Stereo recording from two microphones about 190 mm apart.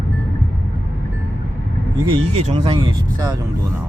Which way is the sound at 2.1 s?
25° right (ahead or behind).